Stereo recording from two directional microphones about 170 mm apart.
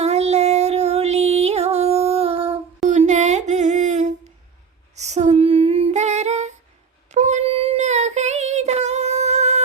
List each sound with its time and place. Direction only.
0.0 s music: 40° right (ahead or behind)
2.9 s a sound: 45° right (ahead or behind)
4.9 s female singing: 40° right (ahead or behind)
7.1 s child singing: 40° right (ahead or behind)